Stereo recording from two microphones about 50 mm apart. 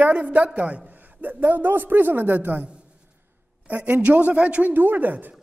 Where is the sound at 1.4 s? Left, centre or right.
Right.